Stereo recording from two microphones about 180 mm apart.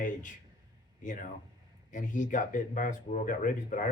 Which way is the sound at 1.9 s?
45° left (ahead or behind).